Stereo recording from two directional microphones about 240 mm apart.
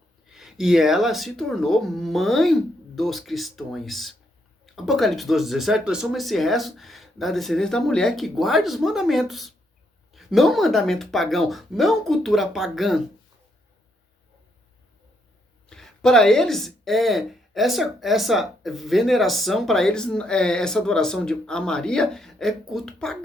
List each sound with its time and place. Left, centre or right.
0.3 s speech: centre
15.7 s speech: centre